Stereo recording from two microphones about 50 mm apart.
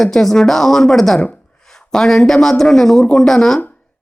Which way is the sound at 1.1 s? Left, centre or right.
Left.